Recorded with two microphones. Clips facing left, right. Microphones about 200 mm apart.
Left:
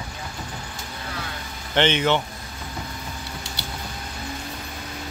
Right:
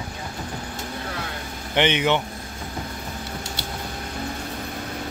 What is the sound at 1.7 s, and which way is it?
Speech, 15° right (ahead or behind).